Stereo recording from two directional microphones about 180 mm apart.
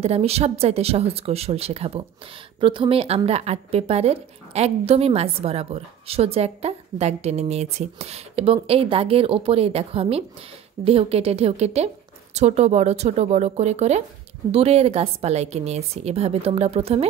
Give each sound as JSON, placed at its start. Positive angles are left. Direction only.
{"t": 0.0, "sound": "speech", "side_deg": -35}